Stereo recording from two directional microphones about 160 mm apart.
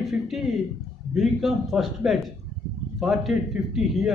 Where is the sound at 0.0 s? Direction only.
Centre (ahead or behind).